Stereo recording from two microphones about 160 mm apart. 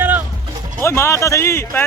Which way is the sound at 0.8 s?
15° left (ahead or behind).